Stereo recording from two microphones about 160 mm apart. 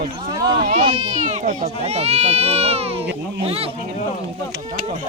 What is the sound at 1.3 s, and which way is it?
Speech, 45° right (ahead or behind).